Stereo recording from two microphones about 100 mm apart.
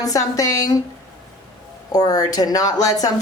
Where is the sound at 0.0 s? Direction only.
35° left (ahead or behind).